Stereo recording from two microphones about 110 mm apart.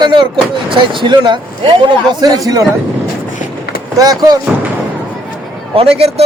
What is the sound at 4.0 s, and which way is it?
Speech, 35° right (ahead or behind).